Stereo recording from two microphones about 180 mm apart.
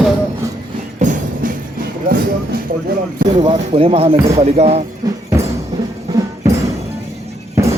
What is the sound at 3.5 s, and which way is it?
Speech, 30° right (ahead or behind).